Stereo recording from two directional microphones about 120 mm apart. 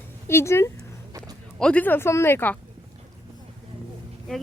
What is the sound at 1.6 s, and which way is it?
Speech, 10° left (ahead or behind).